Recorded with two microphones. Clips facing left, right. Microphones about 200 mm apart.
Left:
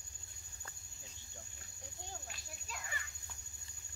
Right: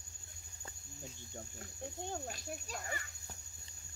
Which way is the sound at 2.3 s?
40° right (ahead or behind).